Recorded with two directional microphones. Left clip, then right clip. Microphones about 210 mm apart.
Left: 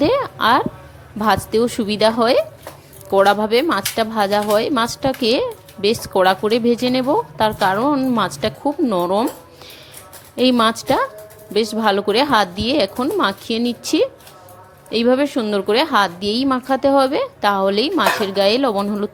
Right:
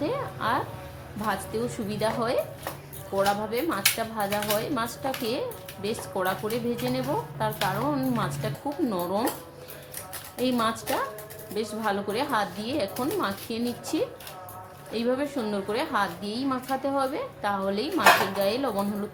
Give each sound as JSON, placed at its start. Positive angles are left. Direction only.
{"t": 0.0, "sound": "a sound", "side_deg": 45}
{"t": 1.2, "sound": "speech", "side_deg": 45}
{"t": 10.3, "sound": "a woman's voice", "side_deg": 45}